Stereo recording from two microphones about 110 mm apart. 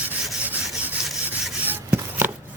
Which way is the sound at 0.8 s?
15° right (ahead or behind).